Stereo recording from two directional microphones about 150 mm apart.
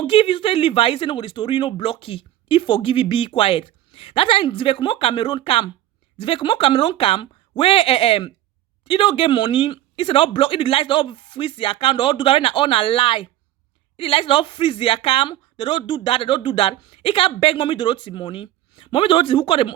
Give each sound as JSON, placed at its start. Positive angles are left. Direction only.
{"t": 0.0, "sound": "a woman's voice", "side_deg": 35}